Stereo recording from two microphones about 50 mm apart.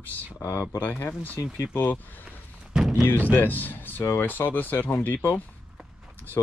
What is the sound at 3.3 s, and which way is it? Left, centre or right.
Speech, left.